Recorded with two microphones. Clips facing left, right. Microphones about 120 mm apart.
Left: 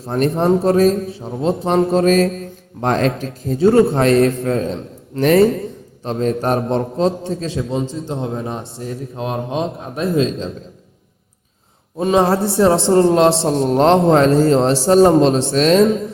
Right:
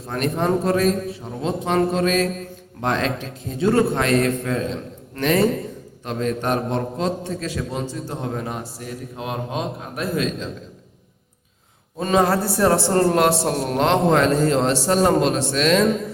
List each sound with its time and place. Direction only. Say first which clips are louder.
0.0 s a man's voice: left 6 dB; 30° left (ahead or behind)
11.9 s a man's voice: left 4 dB; 25° left (ahead or behind)